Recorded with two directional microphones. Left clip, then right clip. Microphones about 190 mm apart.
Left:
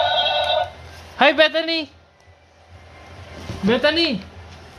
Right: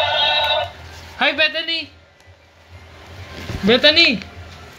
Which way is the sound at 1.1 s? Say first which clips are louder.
Left 3 dB; 40° left (ahead or behind).